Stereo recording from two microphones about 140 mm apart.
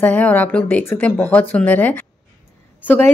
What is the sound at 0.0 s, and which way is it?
Speech, 10° left (ahead or behind).